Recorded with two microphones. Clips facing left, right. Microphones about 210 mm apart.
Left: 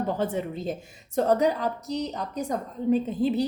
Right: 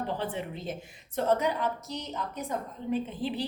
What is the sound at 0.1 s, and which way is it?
A woman's voice, 45° left (ahead or behind).